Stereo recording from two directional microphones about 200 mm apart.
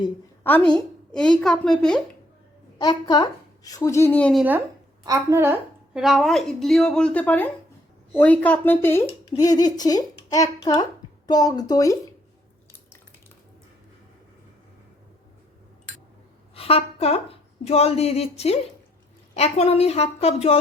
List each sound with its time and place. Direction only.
0.7 s a woman's voice: 5° left (ahead or behind)
2.7 s a woman's voice: 20° left (ahead or behind); by 4.4 s 5° left (ahead or behind)
5.0 s a woman's voice: 15° right (ahead or behind); by 11.9 s 15° left (ahead or behind)
16.6 s a woman's voice: 30° left (ahead or behind)